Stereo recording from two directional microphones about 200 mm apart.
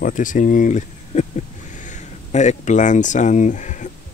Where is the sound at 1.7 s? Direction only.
40° left (ahead or behind).